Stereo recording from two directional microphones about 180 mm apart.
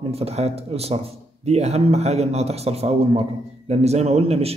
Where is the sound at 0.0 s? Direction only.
35° right (ahead or behind).